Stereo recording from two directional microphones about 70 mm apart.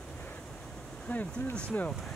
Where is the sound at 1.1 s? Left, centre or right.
Left.